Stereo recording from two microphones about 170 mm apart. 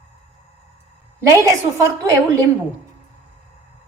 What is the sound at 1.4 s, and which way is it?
Speech, 20° right (ahead or behind).